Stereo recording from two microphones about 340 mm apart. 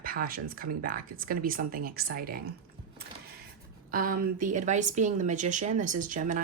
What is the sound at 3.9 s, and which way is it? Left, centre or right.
Speech, right.